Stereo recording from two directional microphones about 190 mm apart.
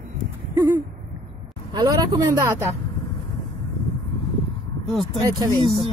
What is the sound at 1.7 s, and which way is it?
Speech, 20° right (ahead or behind).